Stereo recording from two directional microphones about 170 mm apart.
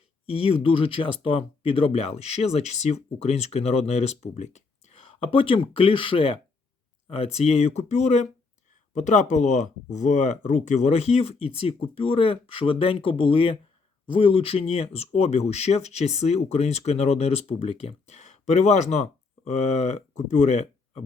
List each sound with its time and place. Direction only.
0.3 s speech: 35° left (ahead or behind)